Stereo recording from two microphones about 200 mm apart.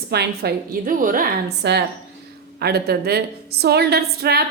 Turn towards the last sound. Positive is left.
turn(degrees=-50)  # may be behind; listen again after turning